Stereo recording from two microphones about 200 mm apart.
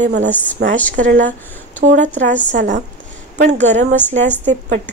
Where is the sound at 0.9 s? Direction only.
40° right (ahead or behind).